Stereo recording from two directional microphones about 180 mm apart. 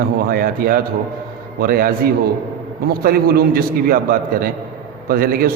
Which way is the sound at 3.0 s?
55° right (ahead or behind).